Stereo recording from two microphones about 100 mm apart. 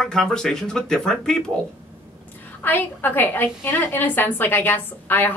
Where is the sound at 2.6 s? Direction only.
20° left (ahead or behind).